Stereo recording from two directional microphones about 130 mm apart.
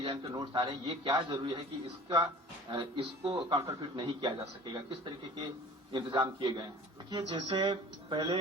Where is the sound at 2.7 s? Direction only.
40° right (ahead or behind).